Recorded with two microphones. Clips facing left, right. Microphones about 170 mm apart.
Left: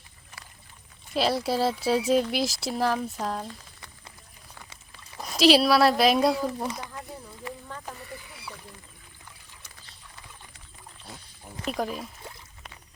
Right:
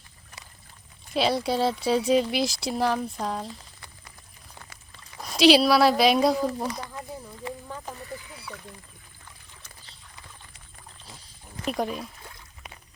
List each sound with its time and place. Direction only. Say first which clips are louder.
1.1 s speech: right 1 dB; centre (ahead or behind)
5.2 s speech: right 2 dB; centre (ahead or behind)
11.6 s speech: right 2 dB; centre (ahead or behind)